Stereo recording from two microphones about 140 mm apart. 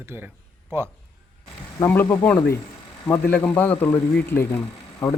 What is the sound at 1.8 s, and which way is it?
A man's voice, 15° left (ahead or behind).